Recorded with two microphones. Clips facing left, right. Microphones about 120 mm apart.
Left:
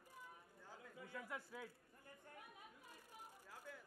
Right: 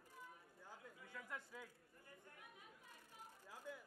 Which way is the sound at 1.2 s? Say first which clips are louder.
Left 2 dB; 10° left (ahead or behind).